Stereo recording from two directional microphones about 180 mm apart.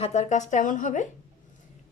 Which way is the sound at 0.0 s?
40° left (ahead or behind).